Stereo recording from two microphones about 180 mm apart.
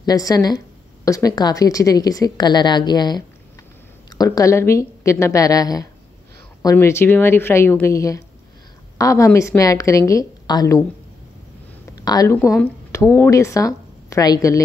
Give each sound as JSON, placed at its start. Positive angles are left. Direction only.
{"t": 0.0, "sound": "a woman's voice", "side_deg": 20}
{"t": 11.9, "sound": "speech", "side_deg": 20}
{"t": 12.4, "sound": "speech", "side_deg": -5}
{"t": 12.9, "sound": "a woman's voice", "side_deg": 15}